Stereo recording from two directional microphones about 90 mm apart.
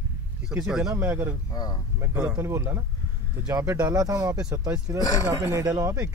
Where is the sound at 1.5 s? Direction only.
45° left (ahead or behind).